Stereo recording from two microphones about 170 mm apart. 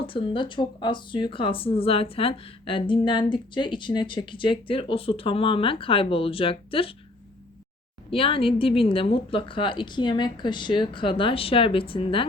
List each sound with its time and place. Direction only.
0.0 s speech: 30° left (ahead or behind)
8.1 s speech: 30° left (ahead or behind)